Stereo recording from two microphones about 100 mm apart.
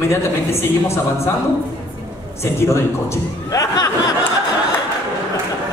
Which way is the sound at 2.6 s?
30° left (ahead or behind).